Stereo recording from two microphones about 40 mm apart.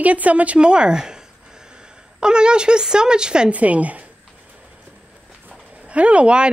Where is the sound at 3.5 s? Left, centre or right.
Right.